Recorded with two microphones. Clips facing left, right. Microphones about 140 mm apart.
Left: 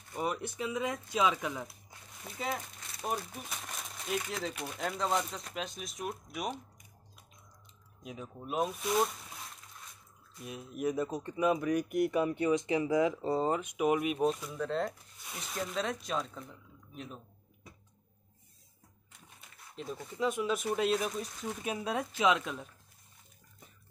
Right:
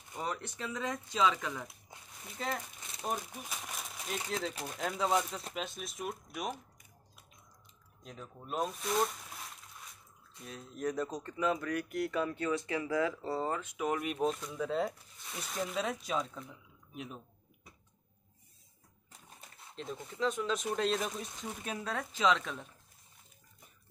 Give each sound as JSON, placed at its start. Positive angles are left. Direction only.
{"t": 0.2, "sound": "speech", "side_deg": 10}
{"t": 8.0, "sound": "speech", "side_deg": 10}
{"t": 10.4, "sound": "speech", "side_deg": 10}
{"t": 14.1, "sound": "speech", "side_deg": 5}
{"t": 19.7, "sound": "speech", "side_deg": 5}
{"t": 21.7, "sound": "speech", "side_deg": 15}